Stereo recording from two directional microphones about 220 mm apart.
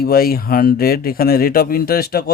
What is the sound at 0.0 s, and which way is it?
Speech, 40° left (ahead or behind).